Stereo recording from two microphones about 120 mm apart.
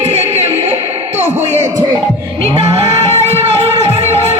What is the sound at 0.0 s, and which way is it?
Music, 65° right (ahead or behind).